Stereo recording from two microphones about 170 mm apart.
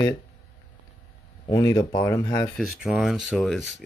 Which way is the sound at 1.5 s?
20° left (ahead or behind).